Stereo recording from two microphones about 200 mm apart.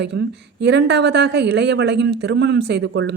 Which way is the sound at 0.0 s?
55° right (ahead or behind).